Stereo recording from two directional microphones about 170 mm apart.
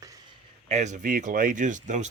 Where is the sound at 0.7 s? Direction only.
45° right (ahead or behind).